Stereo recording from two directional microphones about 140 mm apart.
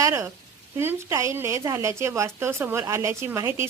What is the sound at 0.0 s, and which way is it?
A woman's voice, 20° right (ahead or behind).